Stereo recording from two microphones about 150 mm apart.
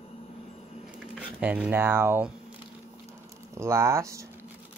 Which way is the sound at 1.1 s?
10° right (ahead or behind).